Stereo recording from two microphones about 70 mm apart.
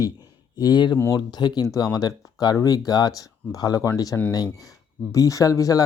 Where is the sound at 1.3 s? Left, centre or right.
Left.